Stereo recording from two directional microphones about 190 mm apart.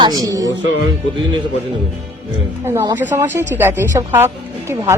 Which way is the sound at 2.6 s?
20° right (ahead or behind).